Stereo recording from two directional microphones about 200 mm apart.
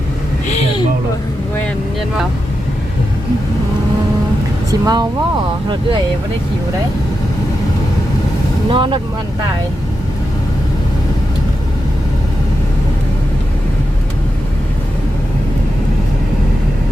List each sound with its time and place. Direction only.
4.7 s speech: 20° right (ahead or behind)
8.7 s speech: 25° right (ahead or behind)